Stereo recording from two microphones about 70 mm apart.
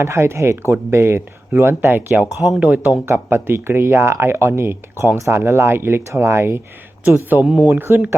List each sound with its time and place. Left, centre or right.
0.0 s speech: right
3.1 s speech: right
7.4 s speech: centre
7.8 s speech: right